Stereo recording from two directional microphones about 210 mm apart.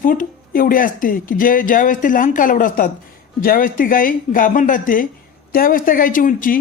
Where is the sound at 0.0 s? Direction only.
40° left (ahead or behind).